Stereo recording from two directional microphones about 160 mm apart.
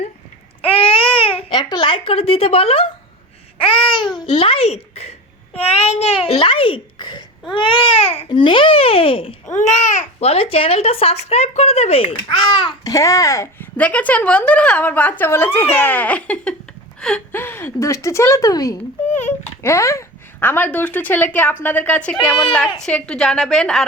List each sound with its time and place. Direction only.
0.6 s speech: 35° left (ahead or behind)
3.6 s babbling: 30° left (ahead or behind)
4.4 s speech: 40° left (ahead or behind)
9.5 s a woman's voice: 50° left (ahead or behind); by 23.8 s centre (ahead or behind)